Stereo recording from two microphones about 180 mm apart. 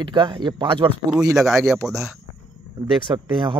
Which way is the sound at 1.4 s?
Centre (ahead or behind).